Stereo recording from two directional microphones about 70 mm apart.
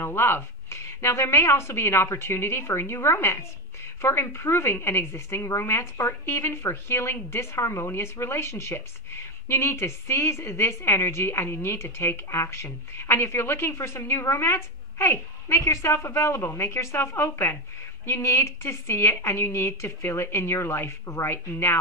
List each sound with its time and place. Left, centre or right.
0.0 s a woman's voice: left